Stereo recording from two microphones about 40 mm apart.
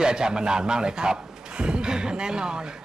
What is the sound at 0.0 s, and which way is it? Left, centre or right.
A man's voice, centre.